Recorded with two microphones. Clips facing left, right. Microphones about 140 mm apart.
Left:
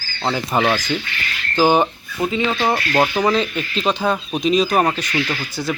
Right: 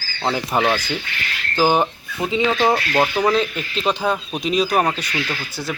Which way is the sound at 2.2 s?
15° right (ahead or behind).